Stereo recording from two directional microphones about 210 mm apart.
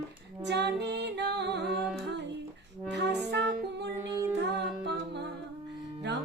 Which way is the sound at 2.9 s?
55° right (ahead or behind).